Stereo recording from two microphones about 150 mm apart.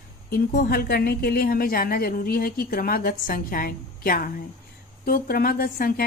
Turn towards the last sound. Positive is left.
turn(degrees=75)  # may be behind; listen again after turning